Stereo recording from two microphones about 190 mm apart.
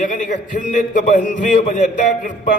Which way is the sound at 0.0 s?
40° left (ahead or behind).